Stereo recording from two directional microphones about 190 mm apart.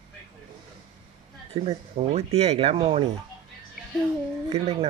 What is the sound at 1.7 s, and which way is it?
Speech, 35° right (ahead or behind).